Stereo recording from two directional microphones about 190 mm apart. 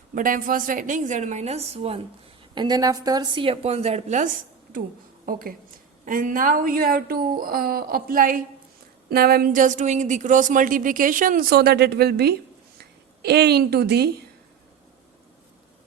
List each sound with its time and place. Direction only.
0.1 s a woman's voice: 45° right (ahead or behind)
2.6 s a woman's voice: 20° right (ahead or behind); by 4.3 s 35° right (ahead or behind)
5.2 s a woman's voice: 50° right (ahead or behind)